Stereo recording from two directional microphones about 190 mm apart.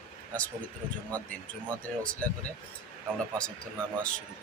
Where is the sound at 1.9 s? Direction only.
5° left (ahead or behind).